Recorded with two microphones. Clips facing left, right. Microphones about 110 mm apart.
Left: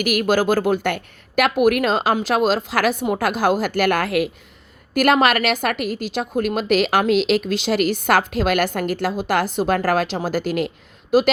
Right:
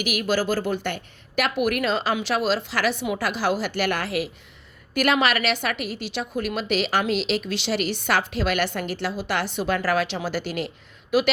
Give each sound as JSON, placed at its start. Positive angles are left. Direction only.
{"t": 0.0, "sound": "a woman's voice", "side_deg": 50}